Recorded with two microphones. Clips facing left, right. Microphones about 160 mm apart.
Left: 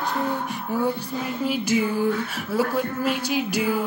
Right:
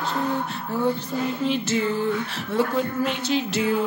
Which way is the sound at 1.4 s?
10° left (ahead or behind).